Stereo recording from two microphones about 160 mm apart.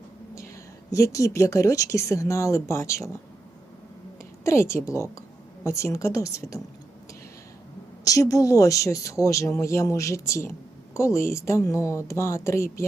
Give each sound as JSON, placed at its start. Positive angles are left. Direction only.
{"t": 0.3, "sound": "a woman's voice", "side_deg": 20}
{"t": 4.4, "sound": "a woman's voice", "side_deg": 15}
{"t": 8.0, "sound": "a woman's voice", "side_deg": 20}